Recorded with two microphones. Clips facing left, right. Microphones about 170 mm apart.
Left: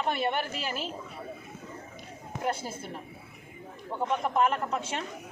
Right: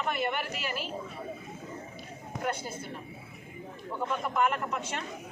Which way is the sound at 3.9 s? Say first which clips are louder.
Left 3 dB; 30° left (ahead or behind).